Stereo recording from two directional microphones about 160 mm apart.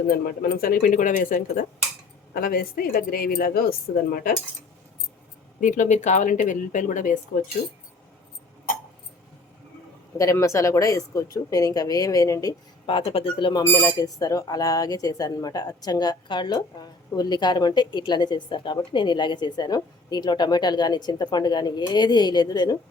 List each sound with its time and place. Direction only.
0.3 s speech: 65° left (ahead or behind)
5.5 s speech: 50° left (ahead or behind)
10.2 s speech: 20° left (ahead or behind)